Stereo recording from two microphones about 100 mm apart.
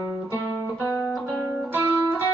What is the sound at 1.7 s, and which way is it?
Music, 20° right (ahead or behind).